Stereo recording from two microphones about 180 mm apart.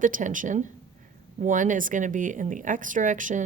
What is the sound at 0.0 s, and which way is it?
Speech, 45° right (ahead or behind).